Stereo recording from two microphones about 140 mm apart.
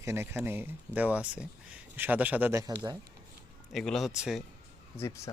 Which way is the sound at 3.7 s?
Centre (ahead or behind).